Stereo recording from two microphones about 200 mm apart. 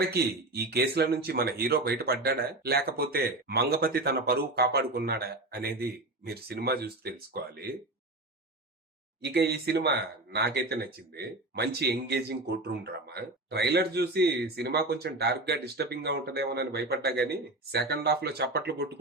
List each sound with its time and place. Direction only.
0.1 s speech: 55° right (ahead or behind)
9.2 s speech: 55° right (ahead or behind)